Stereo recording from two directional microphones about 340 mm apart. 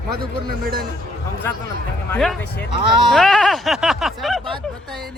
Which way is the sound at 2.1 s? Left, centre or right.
Centre.